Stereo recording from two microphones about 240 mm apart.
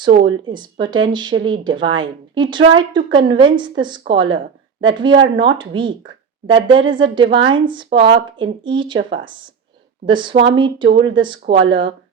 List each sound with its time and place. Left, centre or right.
0.3 s speech: centre